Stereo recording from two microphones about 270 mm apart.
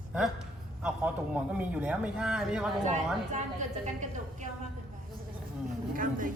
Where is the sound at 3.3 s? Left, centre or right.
Right.